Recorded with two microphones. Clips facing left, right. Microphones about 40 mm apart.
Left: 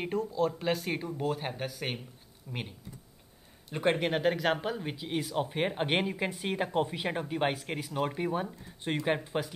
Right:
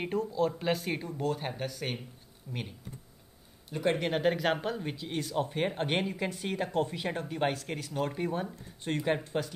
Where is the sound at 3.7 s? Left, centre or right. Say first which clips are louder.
Left 1 dB; left.